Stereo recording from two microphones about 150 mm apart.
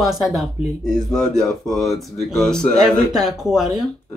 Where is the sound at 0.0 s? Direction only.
Centre (ahead or behind).